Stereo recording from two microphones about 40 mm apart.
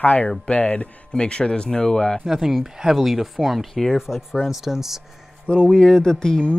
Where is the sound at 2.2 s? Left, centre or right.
Centre.